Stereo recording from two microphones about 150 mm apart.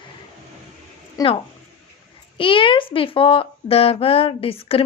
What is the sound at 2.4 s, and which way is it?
Speech, 35° left (ahead or behind).